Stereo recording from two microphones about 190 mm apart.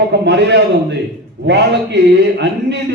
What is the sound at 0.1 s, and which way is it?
Speech, 65° right (ahead or behind).